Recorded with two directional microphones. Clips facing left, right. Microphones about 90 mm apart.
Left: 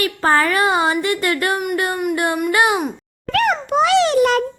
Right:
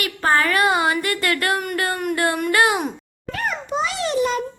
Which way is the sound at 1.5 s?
10° left (ahead or behind).